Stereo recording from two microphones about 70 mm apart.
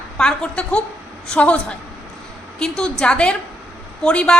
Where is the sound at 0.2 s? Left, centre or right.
Centre.